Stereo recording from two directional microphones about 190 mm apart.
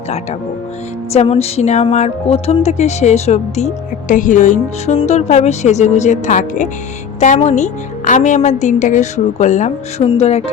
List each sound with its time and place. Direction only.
1.1 s a woman's voice: 35° left (ahead or behind)